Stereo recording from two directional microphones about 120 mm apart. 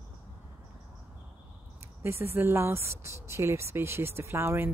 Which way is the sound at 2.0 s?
20° right (ahead or behind).